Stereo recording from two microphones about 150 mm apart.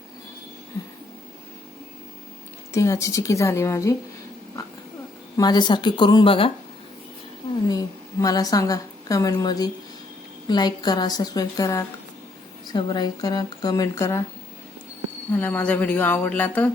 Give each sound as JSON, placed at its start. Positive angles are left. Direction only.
{"t": 2.7, "sound": "speech", "side_deg": 20}
{"t": 5.4, "sound": "speech", "side_deg": 30}
{"t": 7.7, "sound": "a woman's voice", "side_deg": 25}
{"t": 15.3, "sound": "speech", "side_deg": 10}